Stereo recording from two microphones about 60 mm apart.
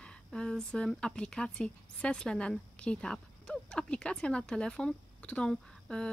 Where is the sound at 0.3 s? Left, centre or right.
Centre.